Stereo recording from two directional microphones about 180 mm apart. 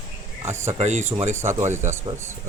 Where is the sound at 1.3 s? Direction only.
15° right (ahead or behind).